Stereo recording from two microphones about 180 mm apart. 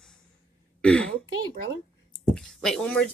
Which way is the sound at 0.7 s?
5° left (ahead or behind).